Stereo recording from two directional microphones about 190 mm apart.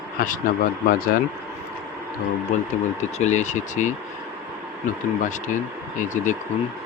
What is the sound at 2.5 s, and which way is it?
Speech, 40° left (ahead or behind).